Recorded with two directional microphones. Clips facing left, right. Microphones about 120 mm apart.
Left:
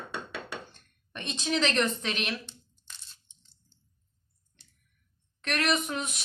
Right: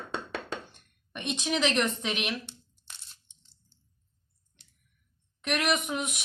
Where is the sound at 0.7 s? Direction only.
15° right (ahead or behind).